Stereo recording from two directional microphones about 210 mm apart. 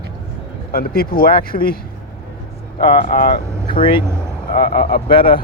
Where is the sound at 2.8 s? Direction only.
25° left (ahead or behind).